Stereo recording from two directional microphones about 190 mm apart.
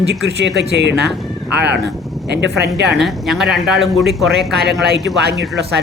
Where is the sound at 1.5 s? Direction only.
60° right (ahead or behind).